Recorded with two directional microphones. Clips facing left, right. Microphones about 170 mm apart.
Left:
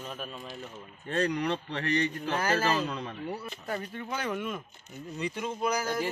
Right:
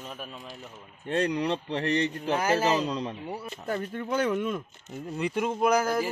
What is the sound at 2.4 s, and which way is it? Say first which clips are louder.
Speech: right 3 dB; 15° right (ahead or behind).